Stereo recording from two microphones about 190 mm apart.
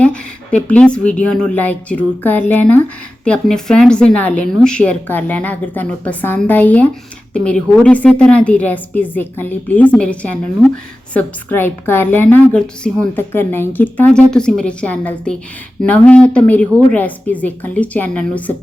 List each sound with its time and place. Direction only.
0.0 s a woman's voice: 5° left (ahead or behind)